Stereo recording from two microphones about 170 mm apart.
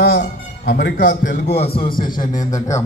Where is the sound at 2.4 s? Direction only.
20° left (ahead or behind).